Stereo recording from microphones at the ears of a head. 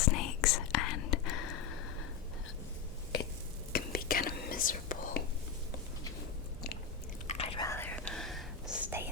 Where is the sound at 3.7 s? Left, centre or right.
Left.